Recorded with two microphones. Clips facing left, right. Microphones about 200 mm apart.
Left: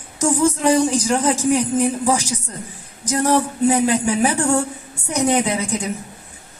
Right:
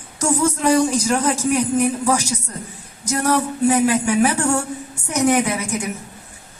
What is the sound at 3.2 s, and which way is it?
Speech, 25° left (ahead or behind).